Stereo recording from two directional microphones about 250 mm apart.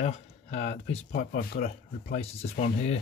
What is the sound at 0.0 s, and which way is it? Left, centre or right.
Speech, left.